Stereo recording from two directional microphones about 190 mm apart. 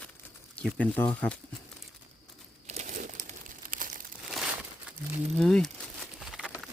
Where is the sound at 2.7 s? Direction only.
40° right (ahead or behind).